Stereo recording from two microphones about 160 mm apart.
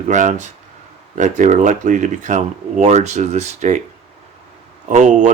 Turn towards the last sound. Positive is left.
turn(degrees=-50)  # may be behind; listen again after turning